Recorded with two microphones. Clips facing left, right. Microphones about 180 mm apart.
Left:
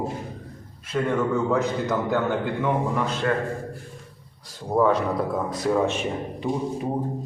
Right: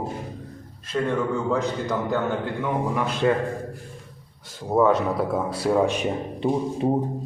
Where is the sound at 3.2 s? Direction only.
15° right (ahead or behind).